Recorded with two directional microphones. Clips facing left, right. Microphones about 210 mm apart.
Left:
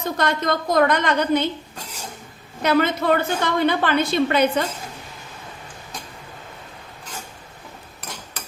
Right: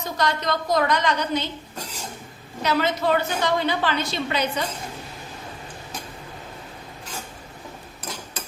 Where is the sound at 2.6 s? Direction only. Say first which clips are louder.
Left 4 dB; 55° left (ahead or behind).